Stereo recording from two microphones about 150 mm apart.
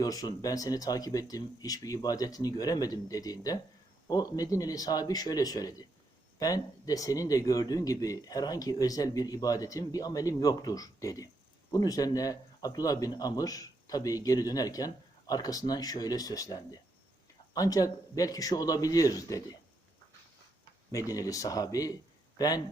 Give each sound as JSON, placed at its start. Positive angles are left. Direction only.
{"t": 0.0, "sound": "speech", "side_deg": 25}
{"t": 20.9, "sound": "speech", "side_deg": 20}